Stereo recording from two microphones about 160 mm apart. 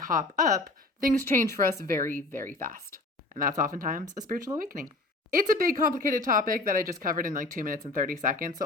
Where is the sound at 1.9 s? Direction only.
55° right (ahead or behind).